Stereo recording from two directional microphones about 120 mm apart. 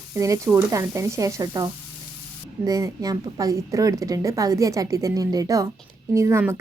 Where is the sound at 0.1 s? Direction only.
25° right (ahead or behind).